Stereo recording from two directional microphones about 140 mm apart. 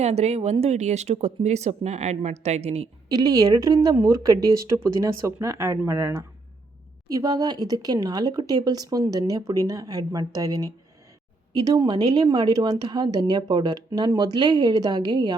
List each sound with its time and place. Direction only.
0.0 s speech: 50° right (ahead or behind)
3.1 s speech: 30° right (ahead or behind)
11.5 s speech: 35° right (ahead or behind)